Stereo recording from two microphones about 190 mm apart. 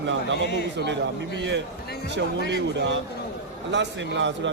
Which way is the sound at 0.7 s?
65° right (ahead or behind).